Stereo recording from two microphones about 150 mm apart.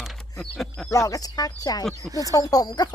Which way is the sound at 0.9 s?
20° left (ahead or behind).